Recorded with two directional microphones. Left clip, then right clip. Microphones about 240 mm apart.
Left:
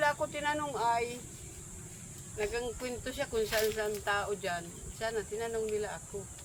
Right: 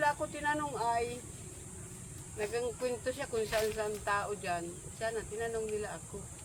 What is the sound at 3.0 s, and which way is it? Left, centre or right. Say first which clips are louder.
Speech: left 1 dB; left.